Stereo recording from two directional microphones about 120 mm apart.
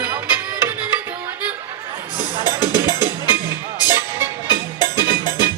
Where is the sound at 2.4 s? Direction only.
35° left (ahead or behind).